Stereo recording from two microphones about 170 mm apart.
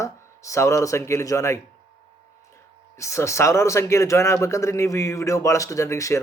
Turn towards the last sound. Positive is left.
turn(degrees=15)  # may be behind; listen again after turning